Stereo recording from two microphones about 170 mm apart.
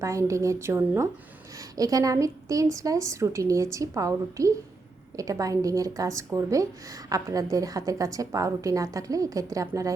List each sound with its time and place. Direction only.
0.0 s a woman's voice: 15° right (ahead or behind)